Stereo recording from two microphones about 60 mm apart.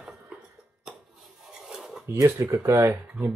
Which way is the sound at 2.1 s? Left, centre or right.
Right.